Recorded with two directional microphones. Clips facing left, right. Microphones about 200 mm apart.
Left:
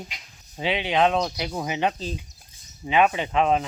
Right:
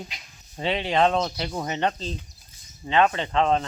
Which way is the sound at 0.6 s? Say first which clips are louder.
Even; centre (ahead or behind).